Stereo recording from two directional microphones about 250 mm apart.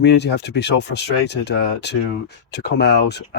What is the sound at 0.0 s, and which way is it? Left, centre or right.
Speech, left.